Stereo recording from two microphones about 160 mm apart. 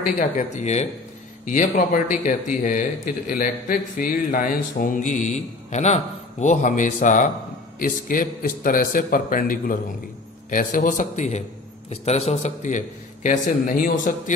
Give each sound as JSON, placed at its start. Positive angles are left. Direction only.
{"t": 0.2, "sound": "a man's voice", "side_deg": 45}